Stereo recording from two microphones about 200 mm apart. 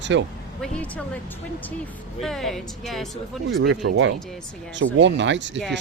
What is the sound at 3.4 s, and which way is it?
Speech, 70° right (ahead or behind).